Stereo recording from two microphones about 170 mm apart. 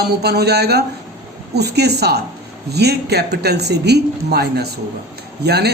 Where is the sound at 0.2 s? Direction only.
70° right (ahead or behind).